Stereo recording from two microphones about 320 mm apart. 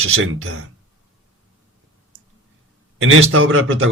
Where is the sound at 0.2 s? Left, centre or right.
Right.